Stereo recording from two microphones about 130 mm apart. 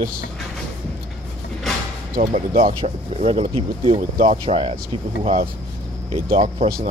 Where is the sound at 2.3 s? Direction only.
55° right (ahead or behind).